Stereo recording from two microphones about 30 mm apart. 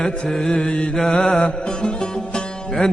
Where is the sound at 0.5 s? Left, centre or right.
Left.